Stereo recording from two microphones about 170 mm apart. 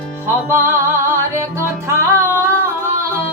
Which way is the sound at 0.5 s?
15° right (ahead or behind).